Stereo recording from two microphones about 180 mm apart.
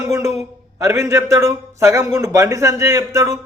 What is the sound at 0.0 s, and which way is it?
A man's voice, 15° right (ahead or behind).